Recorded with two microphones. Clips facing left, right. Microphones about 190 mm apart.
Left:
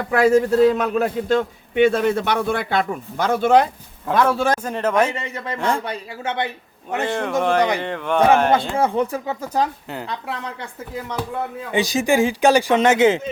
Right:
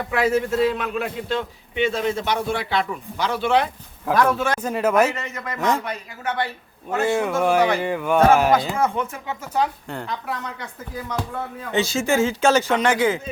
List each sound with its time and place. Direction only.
0.1 s a man's voice: 40° left (ahead or behind)
4.1 s speech: 30° left (ahead or behind)
4.6 s a man's voice: 10° right (ahead or behind)
5.1 s speech: 30° left (ahead or behind)
5.5 s speech: 5° right (ahead or behind)
5.8 s a man's voice: 30° left (ahead or behind)
7.0 s a man's voice: 5° right (ahead or behind)
8.7 s speech: 30° left (ahead or behind)
11.7 s speech: 15° left (ahead or behind)